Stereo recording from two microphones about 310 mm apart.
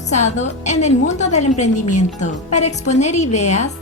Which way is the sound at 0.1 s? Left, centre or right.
Left.